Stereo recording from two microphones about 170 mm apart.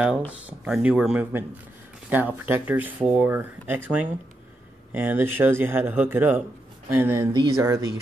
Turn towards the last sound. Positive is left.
turn(degrees=-15)  # may be behind; listen again after turning